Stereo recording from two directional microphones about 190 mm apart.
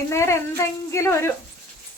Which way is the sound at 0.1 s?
15° left (ahead or behind).